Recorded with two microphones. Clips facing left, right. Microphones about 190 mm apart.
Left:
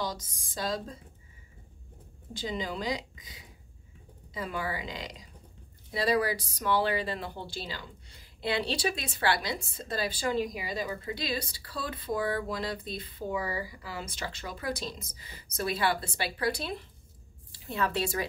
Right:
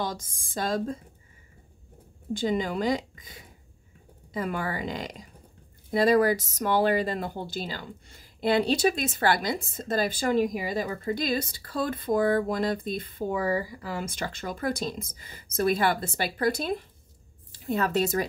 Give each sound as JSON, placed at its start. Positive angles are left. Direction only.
{"t": 0.0, "sound": "a woman's voice", "side_deg": -50}
{"t": 2.3, "sound": "a woman's voice", "side_deg": -50}